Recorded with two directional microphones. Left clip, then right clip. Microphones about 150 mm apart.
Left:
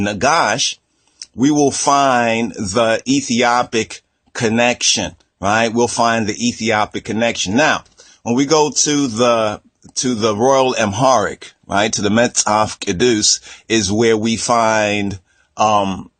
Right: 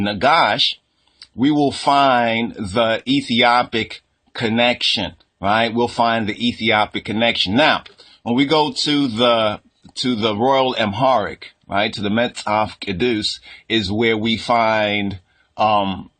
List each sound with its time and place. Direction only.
0.0 s speech: 35° left (ahead or behind)